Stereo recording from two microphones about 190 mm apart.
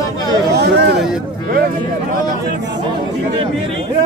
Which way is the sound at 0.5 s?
65° right (ahead or behind).